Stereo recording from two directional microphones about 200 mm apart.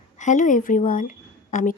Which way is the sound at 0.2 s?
40° left (ahead or behind).